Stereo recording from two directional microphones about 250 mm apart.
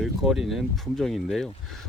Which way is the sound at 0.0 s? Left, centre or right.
Centre.